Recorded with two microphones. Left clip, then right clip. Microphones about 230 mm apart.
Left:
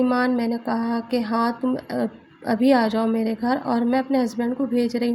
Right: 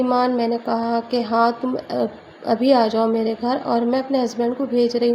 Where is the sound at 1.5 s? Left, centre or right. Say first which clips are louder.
Right 3 dB; left.